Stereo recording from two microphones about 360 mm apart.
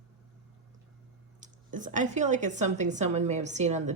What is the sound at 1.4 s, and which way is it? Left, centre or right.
A woman's voice, right.